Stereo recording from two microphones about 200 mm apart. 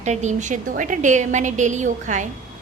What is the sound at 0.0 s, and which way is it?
A woman's voice, 35° right (ahead or behind).